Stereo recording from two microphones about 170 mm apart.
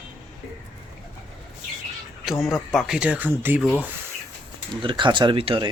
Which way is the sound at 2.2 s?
Centre (ahead or behind).